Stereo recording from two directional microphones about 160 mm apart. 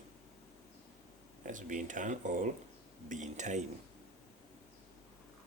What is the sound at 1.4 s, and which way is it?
Speech, 55° right (ahead or behind).